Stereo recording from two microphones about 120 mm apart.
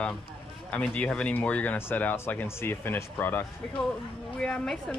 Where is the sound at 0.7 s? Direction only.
10° left (ahead or behind).